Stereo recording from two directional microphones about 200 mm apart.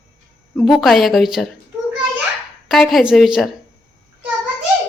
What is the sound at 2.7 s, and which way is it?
Speech, centre (ahead or behind).